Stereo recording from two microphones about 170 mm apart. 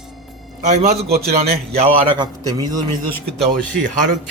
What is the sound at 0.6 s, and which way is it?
Speech, 40° right (ahead or behind).